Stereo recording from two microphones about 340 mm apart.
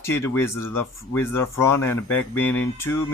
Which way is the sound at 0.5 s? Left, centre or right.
Left.